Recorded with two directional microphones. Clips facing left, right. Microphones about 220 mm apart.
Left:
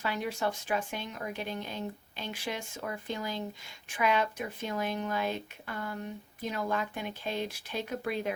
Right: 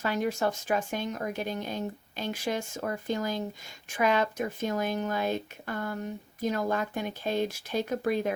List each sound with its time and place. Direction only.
0.0 s speech: 45° right (ahead or behind)